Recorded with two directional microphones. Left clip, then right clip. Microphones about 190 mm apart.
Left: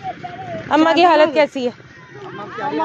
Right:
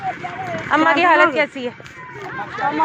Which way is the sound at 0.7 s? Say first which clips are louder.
Left 2 dB; 60° left (ahead or behind).